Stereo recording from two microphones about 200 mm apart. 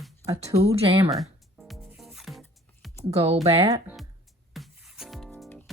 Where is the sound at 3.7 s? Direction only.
15° right (ahead or behind).